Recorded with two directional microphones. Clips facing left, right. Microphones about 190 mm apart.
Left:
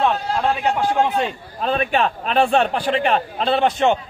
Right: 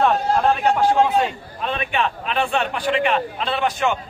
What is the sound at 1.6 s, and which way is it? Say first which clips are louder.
A man's voice: left 4 dB; 40° left (ahead or behind).